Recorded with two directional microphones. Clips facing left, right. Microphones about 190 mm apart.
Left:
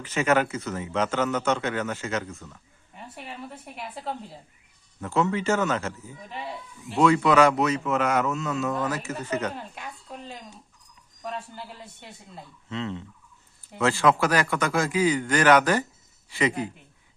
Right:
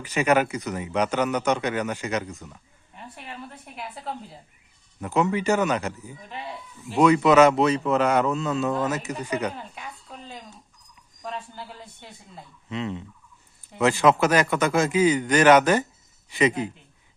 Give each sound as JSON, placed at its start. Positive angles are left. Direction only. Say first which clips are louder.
{"t": 0.0, "sound": "a man's voice", "louder": "right 2 dB", "side_deg": -15}
{"t": 2.9, "sound": "a woman's voice", "louder": "even", "side_deg": 5}
{"t": 4.9, "sound": "a man's voice", "louder": "right 2 dB", "side_deg": -15}
{"t": 9.2, "sound": "a man's voice", "louder": "right 1 dB", "side_deg": -15}
{"t": 11.2, "sound": "a woman's voice", "louder": "even", "side_deg": 0}
{"t": 12.6, "sound": "a man's voice", "louder": "right 2 dB", "side_deg": -15}